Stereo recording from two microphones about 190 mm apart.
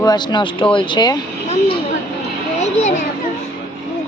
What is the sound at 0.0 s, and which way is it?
Speech, 20° left (ahead or behind).